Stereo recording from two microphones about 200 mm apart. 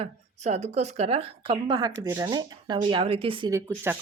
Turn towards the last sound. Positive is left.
turn(degrees=-10)  # may be behind; listen again after turning